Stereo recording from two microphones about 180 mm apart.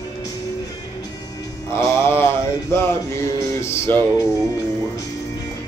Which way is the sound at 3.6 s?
15° left (ahead or behind).